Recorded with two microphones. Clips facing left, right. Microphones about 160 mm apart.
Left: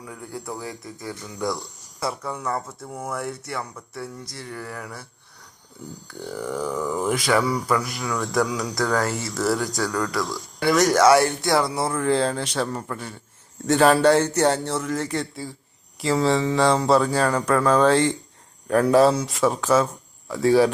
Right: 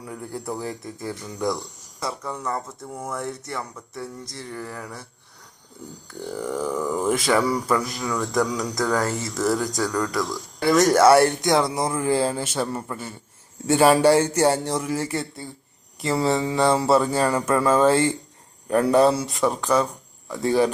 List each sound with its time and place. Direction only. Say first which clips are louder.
0.0 s mantra: right 2 dB; 25° right (ahead or behind)
1.4 s speech: right 1 dB; centre (ahead or behind)
4.4 s mantra: right 1 dB; 20° right (ahead or behind)
6.3 s speech: right 1 dB; 5° right (ahead or behind)
7.1 s mantra: right 2 dB; 25° right (ahead or behind)
7.3 s speech: even; centre (ahead or behind)
7.7 s mantra: right 1 dB; 20° right (ahead or behind)
8.1 s speech: even; centre (ahead or behind)
8.7 s speech: left 1 dB; 15° right (ahead or behind)
9.1 s mantra: even; 20° right (ahead or behind)
9.7 s speech: right 1 dB; 15° right (ahead or behind)
11.3 s speech: right 1 dB; 20° right (ahead or behind); by 20.7 s centre (ahead or behind)